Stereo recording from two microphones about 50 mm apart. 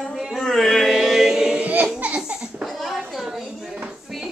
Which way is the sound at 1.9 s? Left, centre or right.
Right.